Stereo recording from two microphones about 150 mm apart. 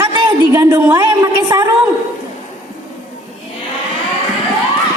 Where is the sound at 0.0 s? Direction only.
25° right (ahead or behind).